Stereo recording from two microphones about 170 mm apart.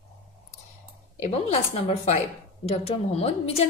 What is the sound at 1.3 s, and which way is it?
A woman's voice, 35° left (ahead or behind).